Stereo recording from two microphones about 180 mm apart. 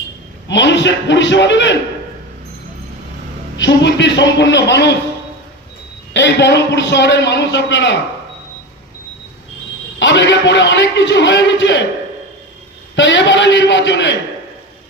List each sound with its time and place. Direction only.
0.4 s a man's voice: 75° left (ahead or behind)
3.6 s a man's voice: 80° left
6.1 s a man's voice: 80° left
10.0 s a man's voice: 80° left
13.0 s a man's voice: 80° left